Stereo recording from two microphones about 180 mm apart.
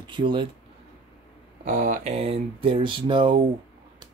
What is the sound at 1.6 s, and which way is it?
Speech, 45° right (ahead or behind).